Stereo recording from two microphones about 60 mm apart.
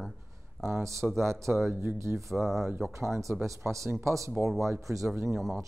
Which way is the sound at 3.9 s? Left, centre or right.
Right.